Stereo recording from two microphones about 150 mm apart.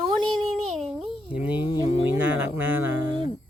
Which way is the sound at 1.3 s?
10° right (ahead or behind).